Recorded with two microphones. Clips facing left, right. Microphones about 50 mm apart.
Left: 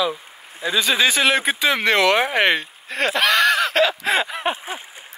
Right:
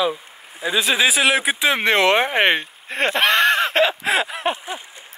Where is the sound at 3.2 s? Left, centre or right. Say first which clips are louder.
Even; right.